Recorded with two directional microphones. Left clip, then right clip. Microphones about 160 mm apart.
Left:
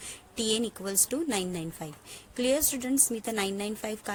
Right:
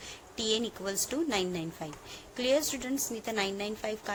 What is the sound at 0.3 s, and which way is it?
A woman's voice, 50° left (ahead or behind).